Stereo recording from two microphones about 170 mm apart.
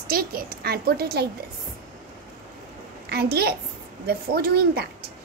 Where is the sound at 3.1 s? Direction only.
70° right (ahead or behind).